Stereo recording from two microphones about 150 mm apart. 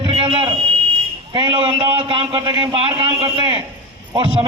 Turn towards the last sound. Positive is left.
turn(degrees=-30)  # may be behind; listen again after turning